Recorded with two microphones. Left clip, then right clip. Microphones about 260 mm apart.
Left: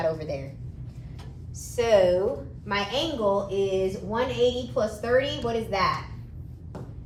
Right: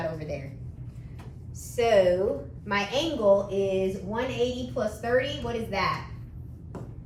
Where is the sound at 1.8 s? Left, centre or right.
Centre.